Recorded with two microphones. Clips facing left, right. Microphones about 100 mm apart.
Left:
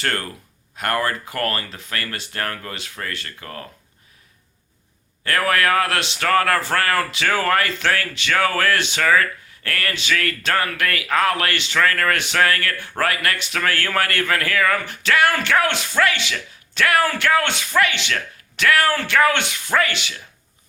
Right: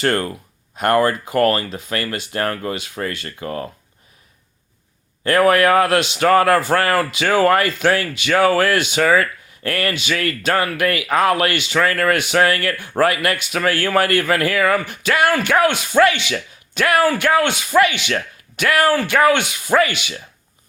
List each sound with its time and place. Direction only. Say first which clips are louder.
0.8 s a man's voice: right 7 dB; 25° right (ahead or behind)
5.2 s a man's voice: right 6 dB; 25° right (ahead or behind)